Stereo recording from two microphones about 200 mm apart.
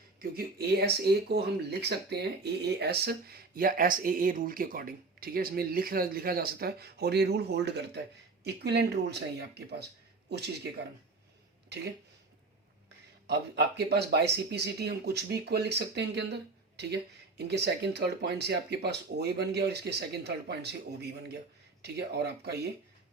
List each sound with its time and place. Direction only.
0.2 s speech: 50° right (ahead or behind)
13.2 s speech: 55° right (ahead or behind)